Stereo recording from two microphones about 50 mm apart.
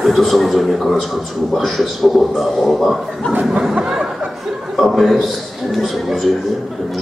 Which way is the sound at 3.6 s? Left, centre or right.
Centre.